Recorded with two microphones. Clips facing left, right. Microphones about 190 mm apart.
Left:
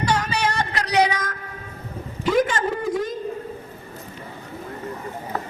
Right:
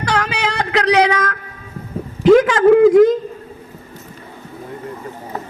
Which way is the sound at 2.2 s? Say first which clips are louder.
Right 11 dB; 90° right.